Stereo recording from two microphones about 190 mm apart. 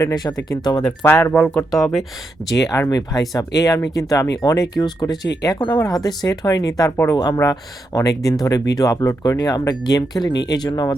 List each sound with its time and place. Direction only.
0.0 s speech: 20° left (ahead or behind); by 2.0 s centre (ahead or behind)
2.6 s speech: 15° left (ahead or behind)